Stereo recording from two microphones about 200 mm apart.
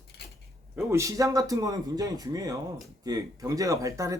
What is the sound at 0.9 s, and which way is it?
Speech, 15° right (ahead or behind).